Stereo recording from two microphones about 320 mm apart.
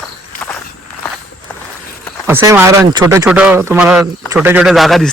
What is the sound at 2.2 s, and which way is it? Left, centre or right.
A man's voice, centre.